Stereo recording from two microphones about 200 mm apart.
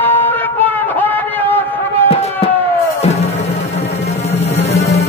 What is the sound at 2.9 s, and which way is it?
Music, 30° left (ahead or behind).